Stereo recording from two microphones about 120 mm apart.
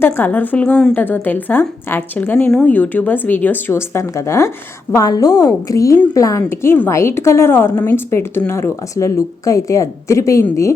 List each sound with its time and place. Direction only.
0.0 s speech: 15° left (ahead or behind)